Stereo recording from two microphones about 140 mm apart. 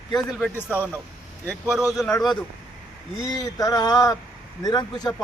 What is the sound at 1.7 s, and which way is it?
Speech, 5° right (ahead or behind).